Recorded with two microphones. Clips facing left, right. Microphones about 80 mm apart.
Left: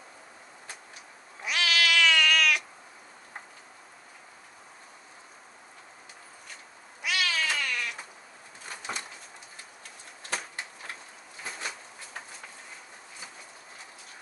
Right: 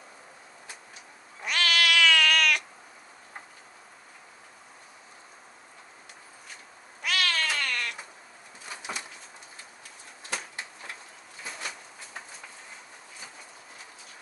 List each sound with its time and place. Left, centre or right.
1.4 s cat: centre
7.0 s cat: centre